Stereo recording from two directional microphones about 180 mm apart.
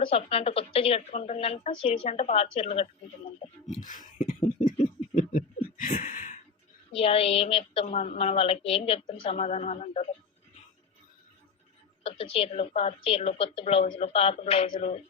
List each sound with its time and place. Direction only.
0.0 s a woman's voice: 30° left (ahead or behind)
3.8 s a sound: 45° left (ahead or behind)
6.9 s a woman's voice: 35° left (ahead or behind)
12.0 s a woman's voice: 30° left (ahead or behind)